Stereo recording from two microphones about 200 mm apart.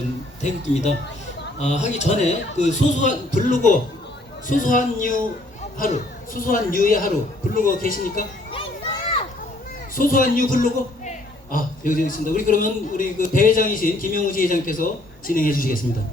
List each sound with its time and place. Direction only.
0.4 s a man's voice: 35° left (ahead or behind)
9.9 s a man's voice: 45° left (ahead or behind)